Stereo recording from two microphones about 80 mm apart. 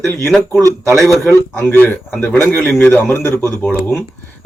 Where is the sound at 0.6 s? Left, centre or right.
Right.